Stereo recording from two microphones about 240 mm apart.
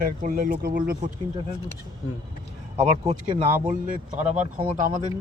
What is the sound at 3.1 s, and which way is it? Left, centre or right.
Speech, right.